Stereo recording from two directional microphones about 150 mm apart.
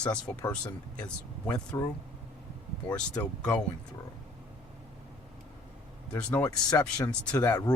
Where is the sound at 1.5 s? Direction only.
25° left (ahead or behind).